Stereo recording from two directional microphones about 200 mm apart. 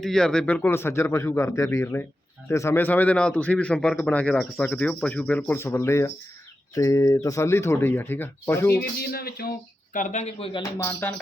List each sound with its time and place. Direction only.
0.0 s a man's voice: 5° left (ahead or behind)
8.8 s speech: 50° left (ahead or behind)
9.9 s speech: 40° left (ahead or behind)
10.6 s a man's voice: 10° left (ahead or behind)